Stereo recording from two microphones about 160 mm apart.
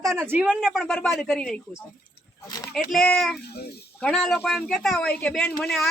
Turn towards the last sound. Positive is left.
turn(degrees=10)  # may be behind; listen again after turning